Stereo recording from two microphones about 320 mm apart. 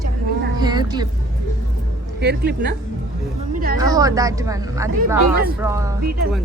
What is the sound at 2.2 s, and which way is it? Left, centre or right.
Speech, right.